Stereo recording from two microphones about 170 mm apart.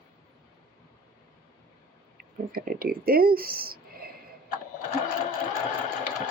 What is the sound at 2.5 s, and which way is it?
Speech, 60° right (ahead or behind).